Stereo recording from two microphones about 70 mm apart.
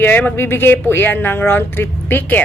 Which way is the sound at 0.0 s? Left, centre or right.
Left.